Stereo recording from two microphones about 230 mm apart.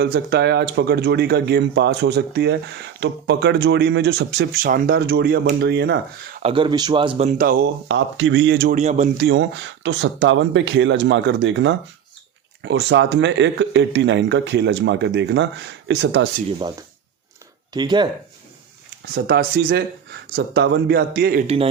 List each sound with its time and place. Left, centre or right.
0.0 s speech: right
6.4 s speech: right
7.3 s speech: right
7.9 s speech: right
9.1 s speech: right
17.7 s speech: centre
19.1 s speech: right
21.4 s speech: right